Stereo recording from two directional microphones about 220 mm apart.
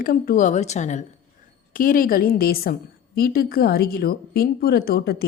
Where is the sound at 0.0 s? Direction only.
40° left (ahead or behind).